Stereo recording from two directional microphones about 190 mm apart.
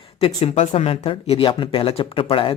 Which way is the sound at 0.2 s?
30° left (ahead or behind).